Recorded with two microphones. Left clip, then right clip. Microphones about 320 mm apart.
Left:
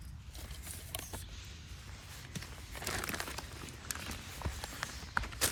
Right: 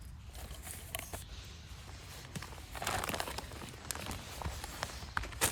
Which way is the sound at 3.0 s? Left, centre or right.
Right.